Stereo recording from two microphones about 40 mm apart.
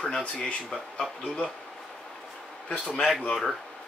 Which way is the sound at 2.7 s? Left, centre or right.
Left.